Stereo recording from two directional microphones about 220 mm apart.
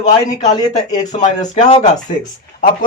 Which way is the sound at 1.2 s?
30° left (ahead or behind).